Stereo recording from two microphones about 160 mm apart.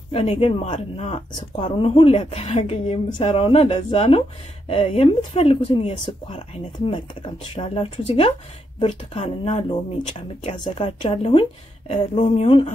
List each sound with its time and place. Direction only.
0.1 s speech: 35° left (ahead or behind)